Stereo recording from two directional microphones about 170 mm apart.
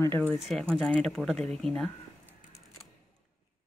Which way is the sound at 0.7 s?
5° left (ahead or behind).